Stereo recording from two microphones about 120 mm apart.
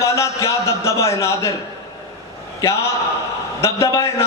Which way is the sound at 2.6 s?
25° left (ahead or behind).